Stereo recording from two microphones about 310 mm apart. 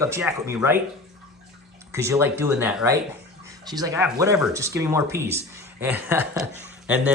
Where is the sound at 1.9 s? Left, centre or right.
Centre.